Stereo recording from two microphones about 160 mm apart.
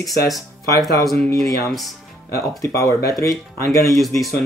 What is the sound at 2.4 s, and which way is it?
Speech, 20° left (ahead or behind).